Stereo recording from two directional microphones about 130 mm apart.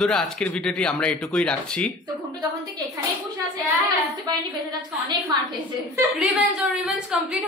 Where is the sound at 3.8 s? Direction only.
30° right (ahead or behind).